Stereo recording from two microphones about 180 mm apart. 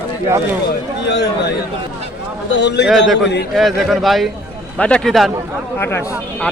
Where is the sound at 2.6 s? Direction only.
70° left (ahead or behind).